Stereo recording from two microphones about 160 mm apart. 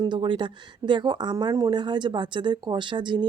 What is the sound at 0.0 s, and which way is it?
Speech, 30° right (ahead or behind).